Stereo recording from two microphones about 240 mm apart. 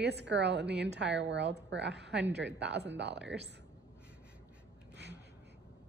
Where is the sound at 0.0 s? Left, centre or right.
Right.